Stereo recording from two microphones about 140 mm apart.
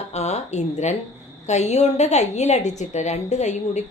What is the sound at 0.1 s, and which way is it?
A woman's voice, 50° left (ahead or behind).